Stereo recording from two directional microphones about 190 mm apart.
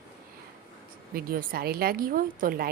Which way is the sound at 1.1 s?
50° right (ahead or behind).